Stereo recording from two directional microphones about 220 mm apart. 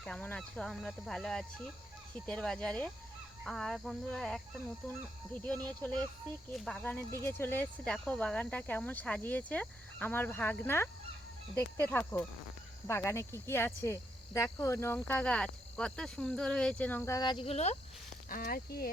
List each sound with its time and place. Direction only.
0.0 s speech: 5° left (ahead or behind); by 17.7 s 30° left (ahead or behind)
18.3 s speech: 40° left (ahead or behind)